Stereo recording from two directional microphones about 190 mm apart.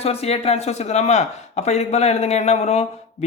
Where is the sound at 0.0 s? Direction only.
30° left (ahead or behind).